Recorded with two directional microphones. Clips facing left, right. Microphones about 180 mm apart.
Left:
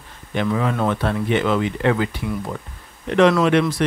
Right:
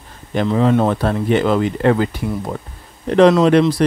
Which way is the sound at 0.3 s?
35° right (ahead or behind).